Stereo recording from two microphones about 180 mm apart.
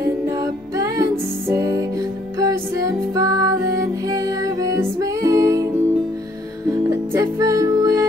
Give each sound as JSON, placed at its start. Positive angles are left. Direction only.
{"t": 0.4, "sound": "music", "side_deg": -20}
{"t": 6.9, "sound": "music", "side_deg": -15}